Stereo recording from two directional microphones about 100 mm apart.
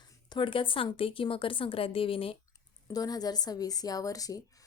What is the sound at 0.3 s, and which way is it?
Speech, 55° left (ahead or behind).